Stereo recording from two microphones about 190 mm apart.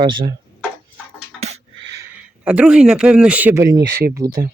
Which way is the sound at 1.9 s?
15° right (ahead or behind).